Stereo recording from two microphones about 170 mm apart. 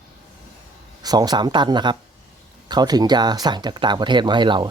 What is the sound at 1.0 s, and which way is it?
Speech, 25° right (ahead or behind).